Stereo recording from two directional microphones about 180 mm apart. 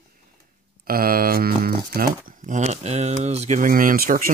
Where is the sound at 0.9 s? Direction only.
55° right (ahead or behind).